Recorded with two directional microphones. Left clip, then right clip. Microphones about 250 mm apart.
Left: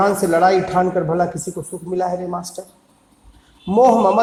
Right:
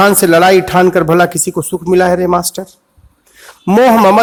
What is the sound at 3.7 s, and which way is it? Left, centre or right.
Speech, right.